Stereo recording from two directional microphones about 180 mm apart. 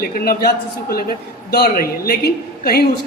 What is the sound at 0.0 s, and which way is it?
A man's voice, 55° left (ahead or behind).